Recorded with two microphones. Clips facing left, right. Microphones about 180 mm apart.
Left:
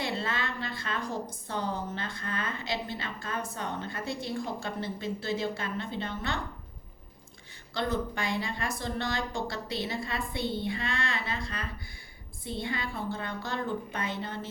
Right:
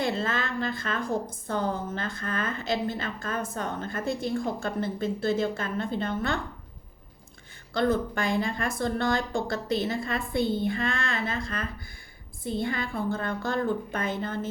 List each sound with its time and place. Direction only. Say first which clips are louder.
0.0 s a woman's voice: right 4 dB; 45° right (ahead or behind)
7.7 s a woman's voice: right 6 dB; 50° right (ahead or behind)